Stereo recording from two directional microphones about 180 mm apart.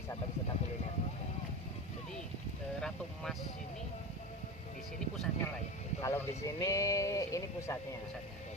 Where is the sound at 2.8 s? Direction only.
5° left (ahead or behind).